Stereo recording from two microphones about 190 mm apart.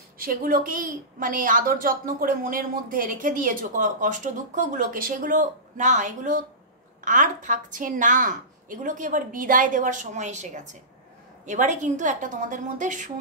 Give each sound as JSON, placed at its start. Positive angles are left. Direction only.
{"t": 0.2, "sound": "a woman's voice", "side_deg": -50}